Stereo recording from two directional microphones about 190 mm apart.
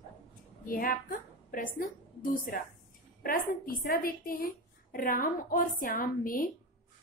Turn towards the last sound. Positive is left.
turn(degrees=45)  # may be behind; listen again after turning